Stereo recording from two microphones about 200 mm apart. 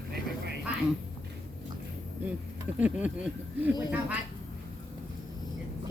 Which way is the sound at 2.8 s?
5° right (ahead or behind).